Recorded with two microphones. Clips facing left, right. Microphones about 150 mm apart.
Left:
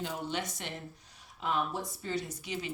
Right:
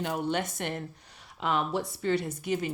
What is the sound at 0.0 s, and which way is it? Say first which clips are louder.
Speech: right 6 dB; 60° right (ahead or behind).